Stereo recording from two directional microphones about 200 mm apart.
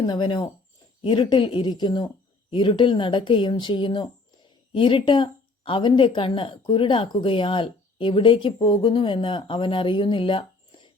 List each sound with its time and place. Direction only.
0.0 s speech: 25° left (ahead or behind)